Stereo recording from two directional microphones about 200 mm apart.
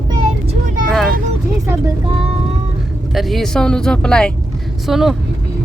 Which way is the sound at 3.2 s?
Centre (ahead or behind).